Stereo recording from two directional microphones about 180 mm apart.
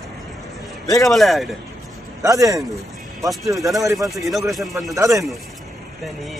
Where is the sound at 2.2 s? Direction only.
20° right (ahead or behind).